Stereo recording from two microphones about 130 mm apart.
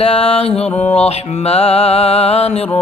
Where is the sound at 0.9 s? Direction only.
50° left (ahead or behind).